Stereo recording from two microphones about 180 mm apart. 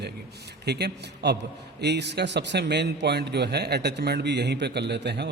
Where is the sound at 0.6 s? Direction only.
65° right (ahead or behind).